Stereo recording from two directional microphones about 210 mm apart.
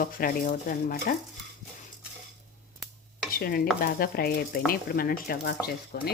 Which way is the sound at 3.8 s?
45° left (ahead or behind).